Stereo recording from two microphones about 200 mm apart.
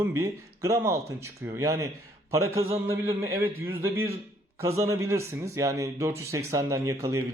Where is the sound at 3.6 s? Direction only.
90° right.